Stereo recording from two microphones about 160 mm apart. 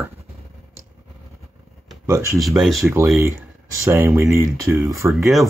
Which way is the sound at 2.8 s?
15° right (ahead or behind).